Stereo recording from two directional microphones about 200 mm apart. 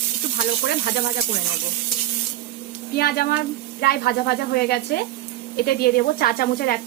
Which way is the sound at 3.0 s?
50° left (ahead or behind).